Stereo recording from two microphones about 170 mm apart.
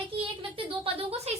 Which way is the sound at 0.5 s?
30° right (ahead or behind).